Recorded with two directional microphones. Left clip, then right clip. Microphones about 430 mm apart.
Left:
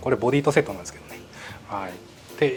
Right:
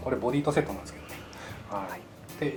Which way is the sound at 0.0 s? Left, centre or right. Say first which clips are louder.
Left 7 dB; left.